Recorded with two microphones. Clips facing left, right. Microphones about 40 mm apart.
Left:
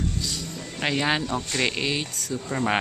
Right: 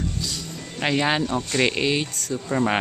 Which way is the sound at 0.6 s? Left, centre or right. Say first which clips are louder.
Right 3 dB; centre.